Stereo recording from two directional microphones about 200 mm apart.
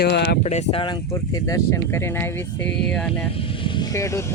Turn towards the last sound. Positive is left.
turn(degrees=15)  # may be behind; listen again after turning